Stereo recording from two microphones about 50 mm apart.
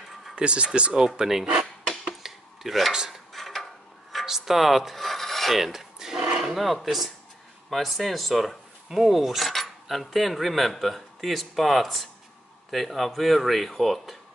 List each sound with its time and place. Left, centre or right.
0.4 s speech: right
2.0 s a sound: centre
2.9 s speech: centre
3.3 s a sound: centre
4.3 s filing: centre
7.7 s speech: centre